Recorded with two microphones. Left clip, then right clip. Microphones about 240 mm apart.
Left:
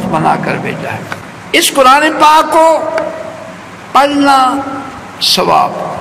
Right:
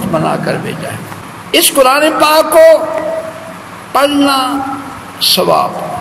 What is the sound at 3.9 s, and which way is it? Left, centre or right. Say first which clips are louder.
A man's voice: left 3 dB; right.